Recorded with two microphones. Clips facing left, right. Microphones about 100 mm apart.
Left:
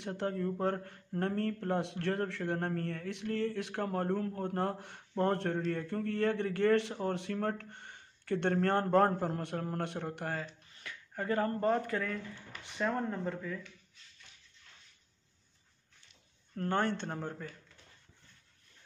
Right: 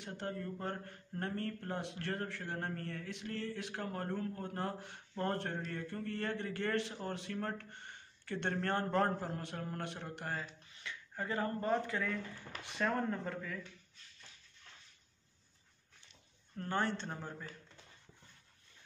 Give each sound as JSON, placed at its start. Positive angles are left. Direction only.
{"t": 0.0, "sound": "a man's voice", "side_deg": 65}
{"t": 12.7, "sound": "speech", "side_deg": 10}
{"t": 16.5, "sound": "speech", "side_deg": 50}